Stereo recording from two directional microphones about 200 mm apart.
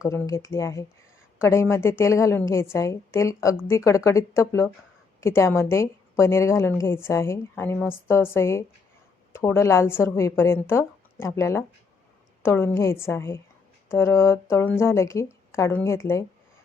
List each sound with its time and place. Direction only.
0.0 s a woman's voice: 15° left (ahead or behind)